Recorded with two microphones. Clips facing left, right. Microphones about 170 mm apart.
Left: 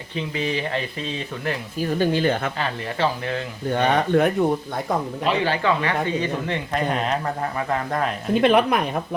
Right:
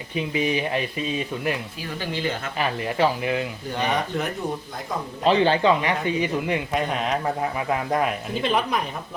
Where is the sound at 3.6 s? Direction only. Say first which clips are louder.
Left 8 dB; 60° left (ahead or behind).